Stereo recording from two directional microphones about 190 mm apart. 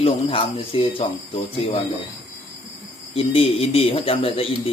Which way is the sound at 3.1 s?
30° left (ahead or behind).